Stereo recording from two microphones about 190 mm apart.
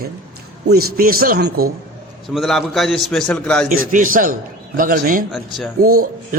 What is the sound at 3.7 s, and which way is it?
Speech, 45° right (ahead or behind).